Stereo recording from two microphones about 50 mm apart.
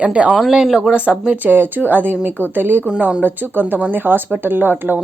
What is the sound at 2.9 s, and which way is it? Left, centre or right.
Speech, right.